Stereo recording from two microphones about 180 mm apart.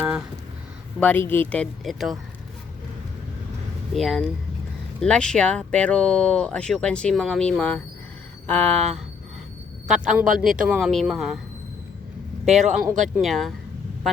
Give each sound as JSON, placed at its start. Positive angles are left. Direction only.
{"t": 0.9, "sound": "speech", "side_deg": 10}
{"t": 3.9, "sound": "a man's voice", "side_deg": 0}
{"t": 12.5, "sound": "speech", "side_deg": -40}
{"t": 13.2, "sound": "speech", "side_deg": 0}